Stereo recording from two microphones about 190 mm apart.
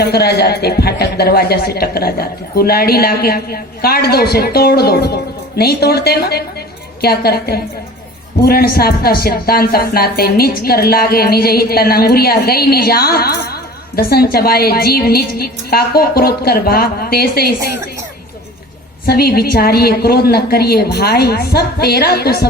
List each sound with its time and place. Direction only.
0.0 s a woman's voice: 55° left (ahead or behind)
19.0 s a woman's voice: 55° left (ahead or behind)